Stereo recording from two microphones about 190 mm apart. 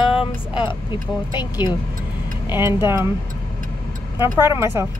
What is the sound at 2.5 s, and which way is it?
Speech, 15° right (ahead or behind).